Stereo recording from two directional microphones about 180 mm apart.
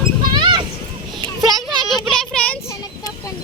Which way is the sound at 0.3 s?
25° right (ahead or behind).